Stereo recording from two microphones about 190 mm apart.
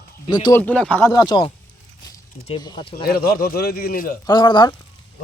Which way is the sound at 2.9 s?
55° left (ahead or behind).